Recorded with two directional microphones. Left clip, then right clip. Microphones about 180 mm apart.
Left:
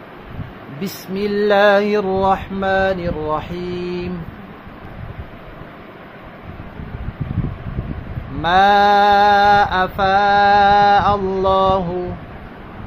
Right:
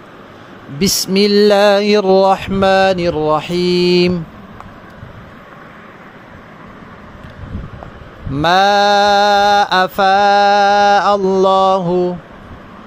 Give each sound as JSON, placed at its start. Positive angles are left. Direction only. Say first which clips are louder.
{"t": 0.7, "sound": "mantra", "louder": "right 11 dB", "side_deg": -60}
{"t": 8.4, "sound": "mantra", "louder": "right 2 dB", "side_deg": -55}